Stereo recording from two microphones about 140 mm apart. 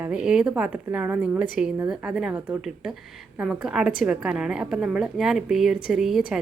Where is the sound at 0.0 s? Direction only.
5° right (ahead or behind).